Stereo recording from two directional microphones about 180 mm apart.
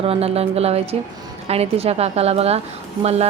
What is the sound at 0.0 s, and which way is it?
Speech, 35° right (ahead or behind).